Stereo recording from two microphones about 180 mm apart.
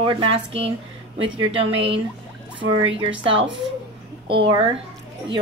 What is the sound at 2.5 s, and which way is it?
Speech, 30° right (ahead or behind).